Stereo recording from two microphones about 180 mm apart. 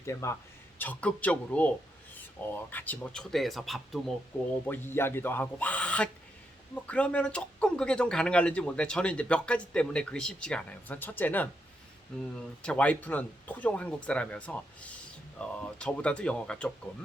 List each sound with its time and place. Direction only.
0.0 s speech: 15° left (ahead or behind); by 4.0 s centre (ahead or behind)
4.6 s speech: 10° left (ahead or behind)
12.6 s speech: 5° left (ahead or behind)